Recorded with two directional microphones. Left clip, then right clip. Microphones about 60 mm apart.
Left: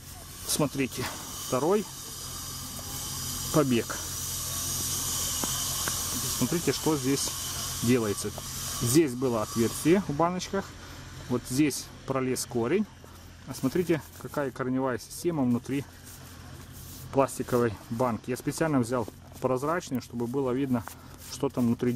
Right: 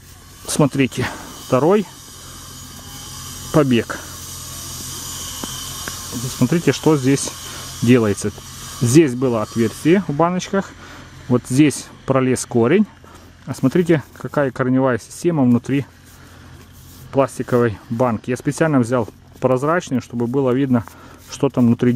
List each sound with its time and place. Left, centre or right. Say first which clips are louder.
0.5 s speech: right 11 dB; right
3.5 s speech: right 10 dB; right
5.4 s a sound: right 3 dB; right
6.4 s speech: right 12 dB; right
17.1 s speech: right 9 dB; right
21.3 s a sound: right 11 dB; right
21.6 s speech: right 11 dB; right